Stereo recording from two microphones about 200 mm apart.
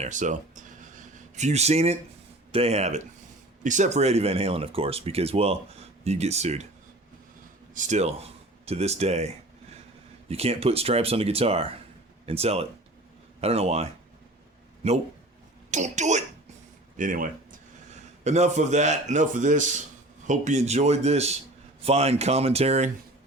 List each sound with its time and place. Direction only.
0.0 s a sound: 40° right (ahead or behind)
2.5 s speech: 30° right (ahead or behind)
7.7 s speech: 40° right (ahead or behind)